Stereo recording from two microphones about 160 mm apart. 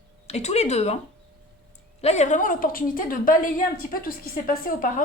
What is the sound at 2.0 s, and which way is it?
A woman's voice, 45° left (ahead or behind).